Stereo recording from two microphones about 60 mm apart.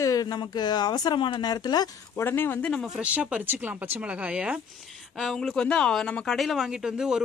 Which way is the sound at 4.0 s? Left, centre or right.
Centre.